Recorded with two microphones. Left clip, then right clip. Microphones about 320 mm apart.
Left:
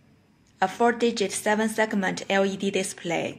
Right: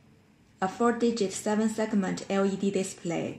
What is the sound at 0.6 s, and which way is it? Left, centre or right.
A woman's voice, left.